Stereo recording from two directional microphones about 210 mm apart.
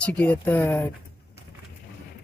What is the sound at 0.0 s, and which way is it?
Speech, 10° left (ahead or behind).